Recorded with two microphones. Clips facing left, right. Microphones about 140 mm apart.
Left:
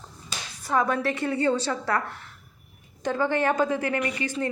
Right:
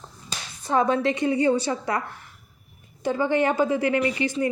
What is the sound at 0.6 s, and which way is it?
Speech, 25° right (ahead or behind).